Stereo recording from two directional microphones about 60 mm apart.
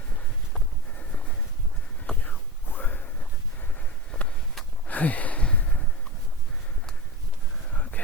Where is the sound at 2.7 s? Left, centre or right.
Left.